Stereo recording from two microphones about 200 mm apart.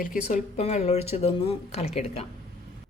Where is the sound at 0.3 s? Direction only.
35° left (ahead or behind).